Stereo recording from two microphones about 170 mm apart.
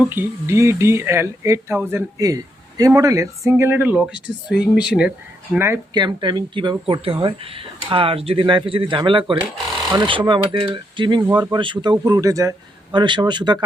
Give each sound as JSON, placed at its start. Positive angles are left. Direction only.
{"t": 0.0, "sound": "speech", "side_deg": -15}
{"t": 5.9, "sound": "a man's voice", "side_deg": -25}
{"t": 11.2, "sound": "speech", "side_deg": -15}
{"t": 11.5, "sound": "a man's voice", "side_deg": -30}